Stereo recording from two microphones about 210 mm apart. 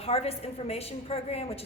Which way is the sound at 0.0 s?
30° left (ahead or behind).